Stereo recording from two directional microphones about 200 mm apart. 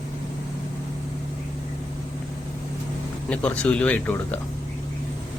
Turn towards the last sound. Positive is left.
turn(degrees=10)  # may be behind; listen again after turning